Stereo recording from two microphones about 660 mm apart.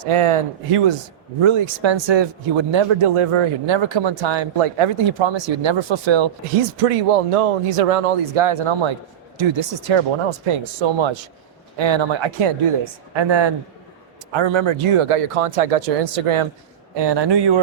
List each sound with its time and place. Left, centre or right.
0.0 s speech: right
16.9 s speech: right